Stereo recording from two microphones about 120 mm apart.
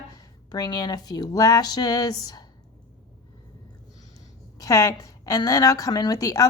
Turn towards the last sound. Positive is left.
turn(degrees=30)  # may be behind; listen again after turning